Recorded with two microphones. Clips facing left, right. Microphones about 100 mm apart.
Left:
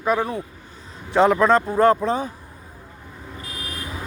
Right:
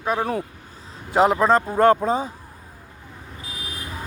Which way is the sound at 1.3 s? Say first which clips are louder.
Left 1 dB; 35° right (ahead or behind).